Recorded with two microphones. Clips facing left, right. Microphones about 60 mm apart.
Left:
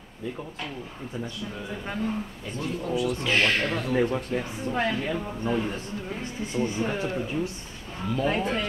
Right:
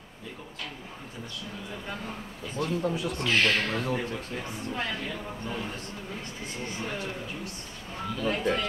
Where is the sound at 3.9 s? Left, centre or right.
Left.